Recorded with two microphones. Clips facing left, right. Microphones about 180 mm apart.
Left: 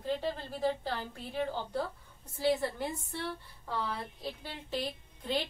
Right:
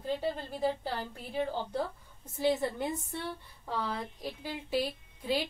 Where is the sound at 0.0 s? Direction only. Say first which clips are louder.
Right 1 dB; 10° right (ahead or behind).